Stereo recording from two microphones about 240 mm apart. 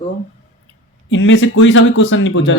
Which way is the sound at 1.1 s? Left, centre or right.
Left.